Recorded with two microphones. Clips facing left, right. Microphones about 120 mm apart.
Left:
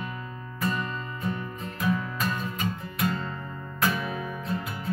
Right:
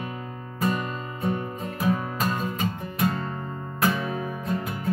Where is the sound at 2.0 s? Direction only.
40° right (ahead or behind).